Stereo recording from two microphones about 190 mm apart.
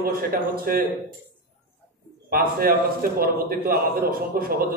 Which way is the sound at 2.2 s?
50° right (ahead or behind).